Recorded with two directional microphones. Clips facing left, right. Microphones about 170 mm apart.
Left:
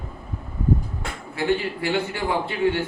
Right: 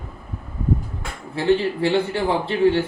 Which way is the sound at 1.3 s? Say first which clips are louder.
Right 5 dB; 30° right (ahead or behind).